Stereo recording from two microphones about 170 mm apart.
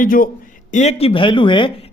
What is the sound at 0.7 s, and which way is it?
Speech, 40° left (ahead or behind).